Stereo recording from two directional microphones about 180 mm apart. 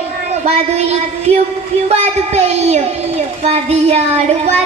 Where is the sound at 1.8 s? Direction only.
35° right (ahead or behind).